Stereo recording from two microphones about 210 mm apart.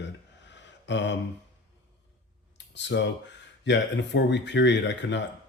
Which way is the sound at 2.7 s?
55° left (ahead or behind).